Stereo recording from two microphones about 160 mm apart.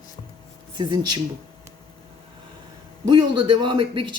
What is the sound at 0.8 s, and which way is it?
Speech, 30° right (ahead or behind).